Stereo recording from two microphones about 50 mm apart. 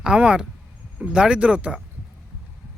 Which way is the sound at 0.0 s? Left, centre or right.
Centre.